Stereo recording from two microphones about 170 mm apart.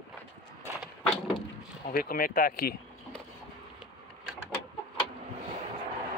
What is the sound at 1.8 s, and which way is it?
Speech, 60° left (ahead or behind).